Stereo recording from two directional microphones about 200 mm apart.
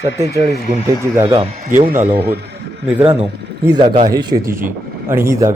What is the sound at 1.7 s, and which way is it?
Speech, 40° right (ahead or behind).